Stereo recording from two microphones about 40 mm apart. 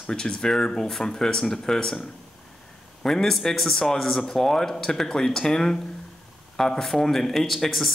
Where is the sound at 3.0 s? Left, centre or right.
Centre.